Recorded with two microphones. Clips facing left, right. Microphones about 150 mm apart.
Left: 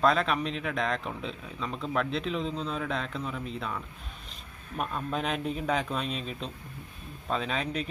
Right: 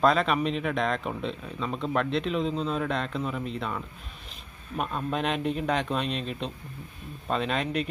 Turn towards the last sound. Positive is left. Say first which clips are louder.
# right 4 dB
turn(degrees=0)  # may be behind; listen again after turning